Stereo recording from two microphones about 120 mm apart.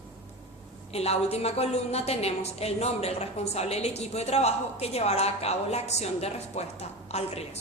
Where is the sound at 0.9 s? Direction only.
60° left (ahead or behind).